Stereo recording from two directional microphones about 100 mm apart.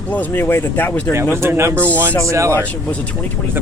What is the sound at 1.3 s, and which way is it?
Speech, 25° right (ahead or behind).